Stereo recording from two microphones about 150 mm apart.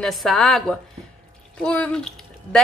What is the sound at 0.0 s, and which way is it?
Speech, centre (ahead or behind).